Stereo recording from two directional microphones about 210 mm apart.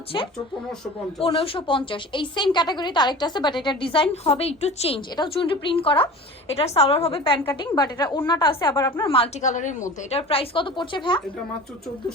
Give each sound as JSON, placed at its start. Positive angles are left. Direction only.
{"t": 1.2, "sound": "a woman's voice", "side_deg": 25}
{"t": 9.0, "sound": "a woman's voice", "side_deg": 25}